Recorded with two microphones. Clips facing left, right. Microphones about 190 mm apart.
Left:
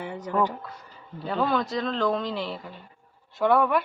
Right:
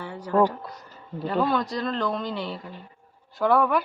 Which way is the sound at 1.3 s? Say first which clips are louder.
Right 1 dB; centre (ahead or behind).